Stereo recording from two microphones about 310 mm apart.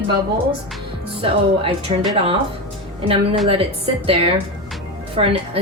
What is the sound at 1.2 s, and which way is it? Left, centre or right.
Speech, centre.